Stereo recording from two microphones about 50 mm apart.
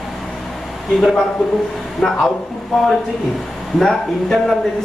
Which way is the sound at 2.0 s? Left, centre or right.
Left.